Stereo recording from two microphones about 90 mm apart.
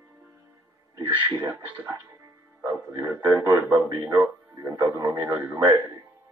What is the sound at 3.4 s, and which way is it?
Speech, 35° right (ahead or behind).